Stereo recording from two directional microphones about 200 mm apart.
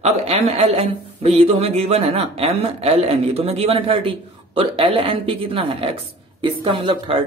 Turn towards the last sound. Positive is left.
turn(degrees=-25)  # may be behind; listen again after turning